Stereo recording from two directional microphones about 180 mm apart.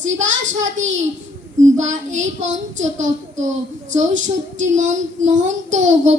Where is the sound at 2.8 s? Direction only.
40° right (ahead or behind).